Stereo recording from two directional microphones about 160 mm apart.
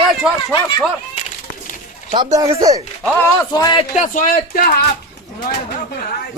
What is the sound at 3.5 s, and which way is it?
Speech, 25° left (ahead or behind).